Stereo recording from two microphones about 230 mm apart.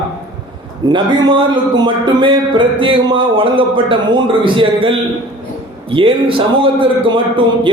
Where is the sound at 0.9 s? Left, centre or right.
Centre.